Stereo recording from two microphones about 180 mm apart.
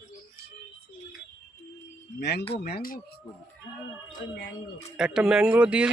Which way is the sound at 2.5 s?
55° left (ahead or behind).